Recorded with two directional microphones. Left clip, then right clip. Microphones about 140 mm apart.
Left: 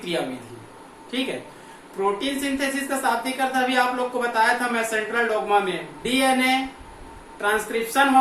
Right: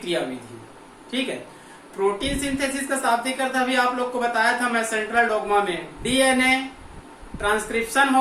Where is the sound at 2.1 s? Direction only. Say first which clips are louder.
Even; 20° right (ahead or behind).